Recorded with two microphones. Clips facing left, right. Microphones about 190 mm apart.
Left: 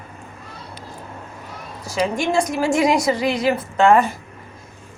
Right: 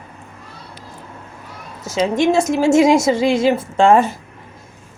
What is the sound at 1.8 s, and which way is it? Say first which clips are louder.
A woman's voice: right 5 dB; 20° right (ahead or behind).